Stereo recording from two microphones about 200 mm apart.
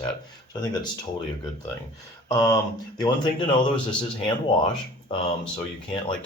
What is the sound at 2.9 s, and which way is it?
Speech, 20° left (ahead or behind).